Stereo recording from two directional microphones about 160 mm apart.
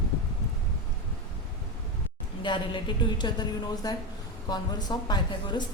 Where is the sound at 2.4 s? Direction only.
30° left (ahead or behind).